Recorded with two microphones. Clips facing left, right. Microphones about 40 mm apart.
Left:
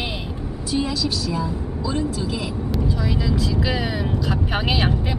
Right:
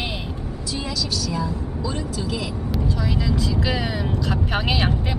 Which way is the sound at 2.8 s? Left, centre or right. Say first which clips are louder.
Even; centre.